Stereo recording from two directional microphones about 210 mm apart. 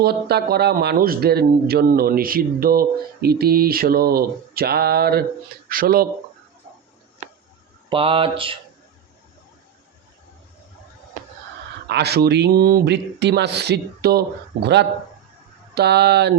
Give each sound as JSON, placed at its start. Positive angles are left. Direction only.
{"t": 0.0, "sound": "speech", "side_deg": -50}
{"t": 7.9, "sound": "speech", "side_deg": -25}
{"t": 11.9, "sound": "speech", "side_deg": -50}